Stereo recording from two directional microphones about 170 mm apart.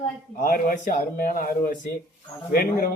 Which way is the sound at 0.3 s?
55° left (ahead or behind).